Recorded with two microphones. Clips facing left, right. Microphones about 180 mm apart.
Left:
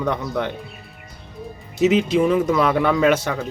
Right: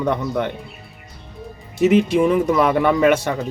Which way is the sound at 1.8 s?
60° right (ahead or behind).